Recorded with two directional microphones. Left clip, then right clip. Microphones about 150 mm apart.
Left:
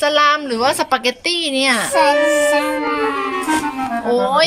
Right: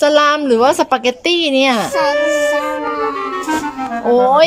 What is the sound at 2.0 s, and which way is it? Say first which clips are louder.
Music: left 3 dB; centre (ahead or behind).